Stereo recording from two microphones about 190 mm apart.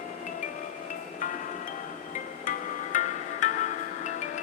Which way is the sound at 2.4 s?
45° left (ahead or behind).